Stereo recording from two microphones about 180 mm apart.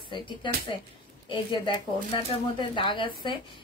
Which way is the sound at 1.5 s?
25° left (ahead or behind).